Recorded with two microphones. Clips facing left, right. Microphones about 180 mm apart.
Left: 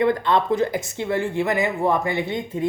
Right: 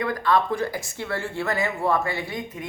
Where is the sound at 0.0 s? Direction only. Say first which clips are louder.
Left 3 dB; 25° left (ahead or behind).